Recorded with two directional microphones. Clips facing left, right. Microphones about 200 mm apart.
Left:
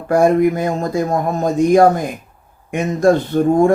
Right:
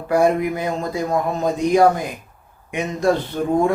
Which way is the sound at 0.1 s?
45° left (ahead or behind).